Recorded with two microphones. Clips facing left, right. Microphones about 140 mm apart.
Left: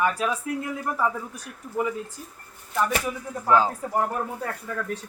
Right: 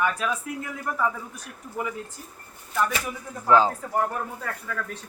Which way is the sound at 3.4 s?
5° left (ahead or behind).